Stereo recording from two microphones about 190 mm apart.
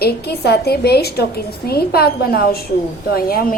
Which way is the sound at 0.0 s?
60° left (ahead or behind).